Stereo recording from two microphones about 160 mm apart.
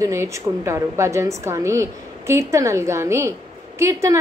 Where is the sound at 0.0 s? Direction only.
20° right (ahead or behind).